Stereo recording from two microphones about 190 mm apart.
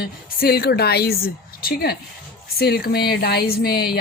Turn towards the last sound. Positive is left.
turn(degrees=55)  # may be behind; listen again after turning